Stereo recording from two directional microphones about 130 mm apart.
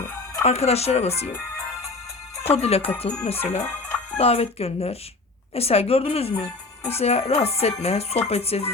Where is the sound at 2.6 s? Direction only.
50° left (ahead or behind).